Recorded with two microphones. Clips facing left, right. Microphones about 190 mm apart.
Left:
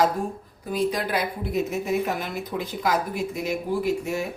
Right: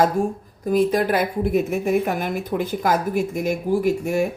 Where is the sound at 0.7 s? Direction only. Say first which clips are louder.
Right 6 dB; 50° right (ahead or behind).